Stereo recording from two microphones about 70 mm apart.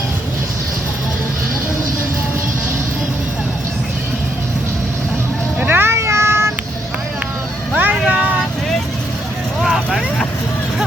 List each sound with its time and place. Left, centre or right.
5.5 s a sound: right
7.7 s vehicle: right
9.6 s vehicle: centre